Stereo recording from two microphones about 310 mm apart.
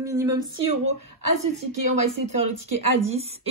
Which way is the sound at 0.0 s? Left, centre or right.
Centre.